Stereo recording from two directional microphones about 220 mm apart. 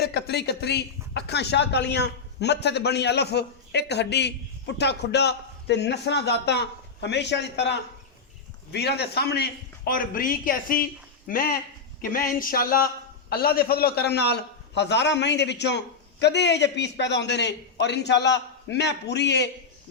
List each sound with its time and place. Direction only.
0.0 s speech: 45° left (ahead or behind)